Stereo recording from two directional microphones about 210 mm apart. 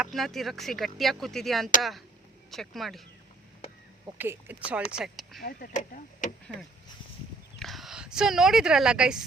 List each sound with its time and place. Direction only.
0.0 s speech: centre (ahead or behind)
4.2 s speech: 10° right (ahead or behind)
5.4 s speech: 45° left (ahead or behind)
7.6 s speech: centre (ahead or behind)